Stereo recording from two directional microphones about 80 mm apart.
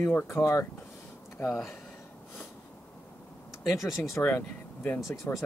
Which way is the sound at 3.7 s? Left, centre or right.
Left.